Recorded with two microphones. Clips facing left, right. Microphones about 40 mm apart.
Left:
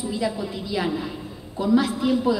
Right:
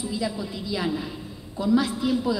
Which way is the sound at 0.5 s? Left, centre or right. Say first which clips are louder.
Left 3 dB; left.